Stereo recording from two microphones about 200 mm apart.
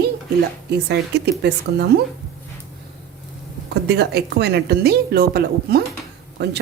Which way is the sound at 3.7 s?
55° right (ahead or behind).